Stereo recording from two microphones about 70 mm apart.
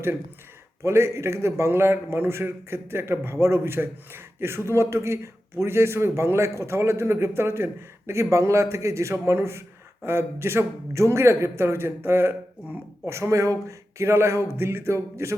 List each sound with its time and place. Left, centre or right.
0.8 s a man's voice: right